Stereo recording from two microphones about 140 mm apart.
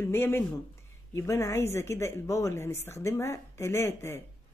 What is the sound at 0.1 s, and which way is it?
A woman's voice, 15° left (ahead or behind).